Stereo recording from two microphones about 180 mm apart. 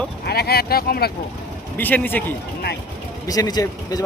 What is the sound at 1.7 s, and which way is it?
Speech, 10° left (ahead or behind).